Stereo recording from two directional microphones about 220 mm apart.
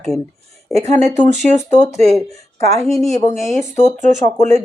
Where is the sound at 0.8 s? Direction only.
35° right (ahead or behind).